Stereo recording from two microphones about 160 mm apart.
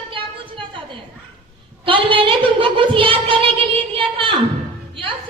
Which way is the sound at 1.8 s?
30° right (ahead or behind).